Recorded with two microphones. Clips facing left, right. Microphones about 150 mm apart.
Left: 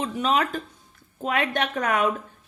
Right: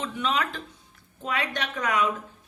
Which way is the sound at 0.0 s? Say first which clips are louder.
Left 4 dB; 40° left (ahead or behind).